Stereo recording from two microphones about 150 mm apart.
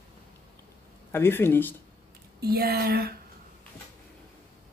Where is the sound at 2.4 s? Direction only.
90° right.